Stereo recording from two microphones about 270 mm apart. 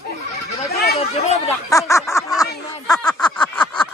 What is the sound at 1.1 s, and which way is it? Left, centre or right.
Speech, left.